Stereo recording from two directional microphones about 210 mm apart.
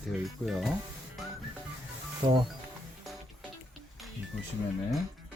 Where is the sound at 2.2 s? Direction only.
20° right (ahead or behind).